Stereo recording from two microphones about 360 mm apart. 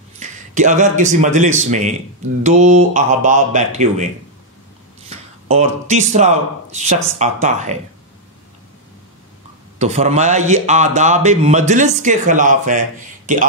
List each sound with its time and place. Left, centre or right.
0.2 s a man's voice: centre
5.1 s speech: centre
9.8 s a man's voice: centre